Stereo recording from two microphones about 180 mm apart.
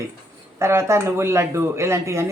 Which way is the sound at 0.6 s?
15° right (ahead or behind).